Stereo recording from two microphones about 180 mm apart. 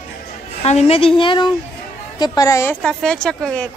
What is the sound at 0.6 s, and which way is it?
A woman's voice, 35° left (ahead or behind).